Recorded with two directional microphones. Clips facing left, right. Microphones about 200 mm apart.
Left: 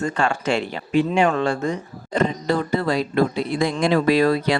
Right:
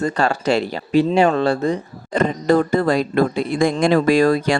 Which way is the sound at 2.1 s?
50° right (ahead or behind).